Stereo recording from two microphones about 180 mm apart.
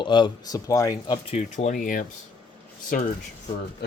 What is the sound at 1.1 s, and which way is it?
Speech, 35° left (ahead or behind).